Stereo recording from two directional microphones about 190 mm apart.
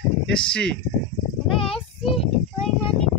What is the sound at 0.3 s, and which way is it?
Speech, 5° left (ahead or behind).